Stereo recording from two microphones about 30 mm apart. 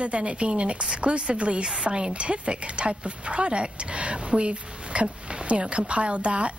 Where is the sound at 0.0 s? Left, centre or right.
Right.